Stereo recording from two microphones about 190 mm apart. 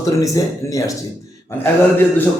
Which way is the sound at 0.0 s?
15° left (ahead or behind).